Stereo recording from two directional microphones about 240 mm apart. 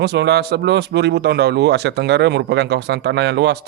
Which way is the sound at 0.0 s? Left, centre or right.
Right.